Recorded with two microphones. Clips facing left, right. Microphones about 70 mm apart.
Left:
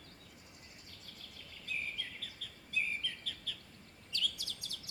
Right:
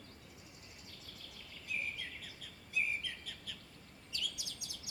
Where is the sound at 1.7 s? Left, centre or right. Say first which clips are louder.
Even; centre.